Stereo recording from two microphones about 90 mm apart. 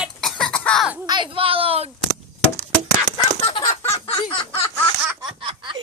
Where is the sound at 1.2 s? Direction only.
90° right.